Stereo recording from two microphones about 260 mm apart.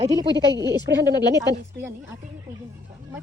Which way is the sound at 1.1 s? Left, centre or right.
Centre.